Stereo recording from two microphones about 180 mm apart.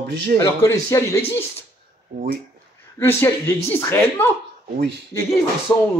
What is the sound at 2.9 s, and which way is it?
Speech, 15° left (ahead or behind).